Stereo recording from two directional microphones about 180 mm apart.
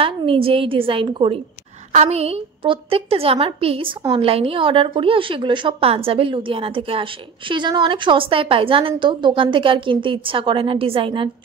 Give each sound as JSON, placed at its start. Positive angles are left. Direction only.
{"t": 0.0, "sound": "a woman's voice", "side_deg": -30}